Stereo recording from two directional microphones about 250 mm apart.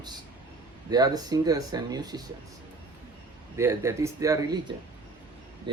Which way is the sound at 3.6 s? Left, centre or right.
Centre.